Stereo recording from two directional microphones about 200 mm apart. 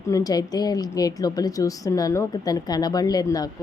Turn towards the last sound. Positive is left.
turn(degrees=20)  # may be behind; listen again after turning